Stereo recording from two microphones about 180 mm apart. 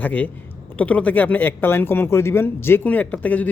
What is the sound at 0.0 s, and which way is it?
Speech, 10° left (ahead or behind).